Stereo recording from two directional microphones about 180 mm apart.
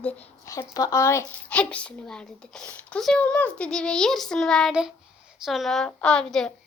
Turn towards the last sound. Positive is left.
turn(degrees=5)  # may be behind; listen again after turning